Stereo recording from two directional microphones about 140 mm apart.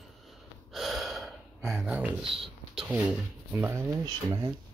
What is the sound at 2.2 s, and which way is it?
Speech, 40° right (ahead or behind).